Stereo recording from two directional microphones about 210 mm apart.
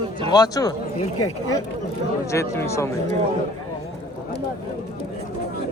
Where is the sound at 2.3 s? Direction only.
15° left (ahead or behind).